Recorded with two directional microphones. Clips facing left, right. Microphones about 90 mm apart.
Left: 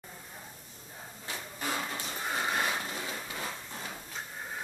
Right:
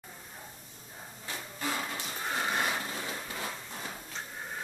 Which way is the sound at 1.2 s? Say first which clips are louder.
Right 1 dB; 15° left (ahead or behind).